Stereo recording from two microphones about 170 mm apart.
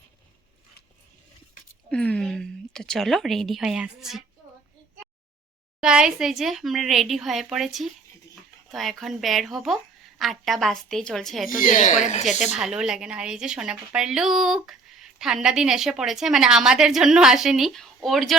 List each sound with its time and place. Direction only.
1.9 s a woman's voice: 5° left (ahead or behind)
5.8 s a woman's voice: 5° right (ahead or behind)
11.6 s speech: 50° left (ahead or behind)
12.2 s a woman's voice: centre (ahead or behind)